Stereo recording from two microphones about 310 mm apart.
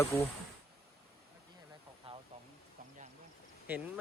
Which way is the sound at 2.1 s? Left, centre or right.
Centre.